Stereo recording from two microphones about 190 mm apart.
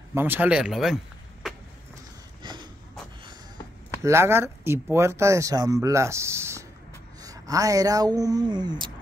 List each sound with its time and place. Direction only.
0.1 s speech: 10° right (ahead or behind)
2.4 s snort: 25° right (ahead or behind)
4.0 s speech: 15° right (ahead or behind)